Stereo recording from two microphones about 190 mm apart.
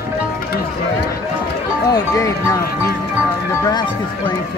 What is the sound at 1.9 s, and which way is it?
Speech, 20° left (ahead or behind).